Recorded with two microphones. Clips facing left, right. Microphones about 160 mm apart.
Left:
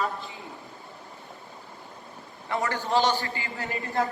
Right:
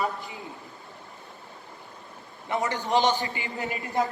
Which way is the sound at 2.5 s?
20° right (ahead or behind).